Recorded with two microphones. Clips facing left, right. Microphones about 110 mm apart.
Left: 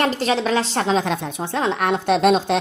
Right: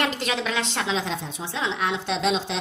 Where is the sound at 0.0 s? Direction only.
35° left (ahead or behind).